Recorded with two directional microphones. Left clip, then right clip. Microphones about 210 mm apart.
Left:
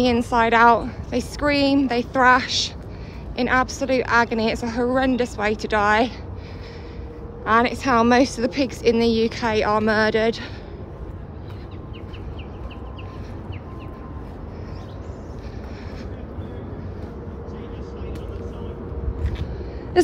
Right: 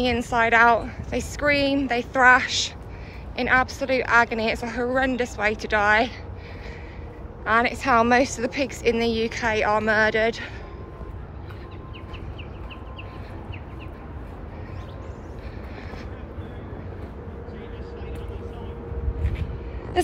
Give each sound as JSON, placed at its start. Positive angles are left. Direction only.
{"t": 0.0, "sound": "a woman's voice", "side_deg": 20}
{"t": 7.4, "sound": "a woman's voice", "side_deg": 15}